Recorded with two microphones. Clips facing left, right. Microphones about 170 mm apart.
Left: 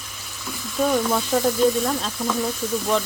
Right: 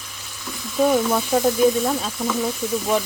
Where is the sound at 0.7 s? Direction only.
5° right (ahead or behind).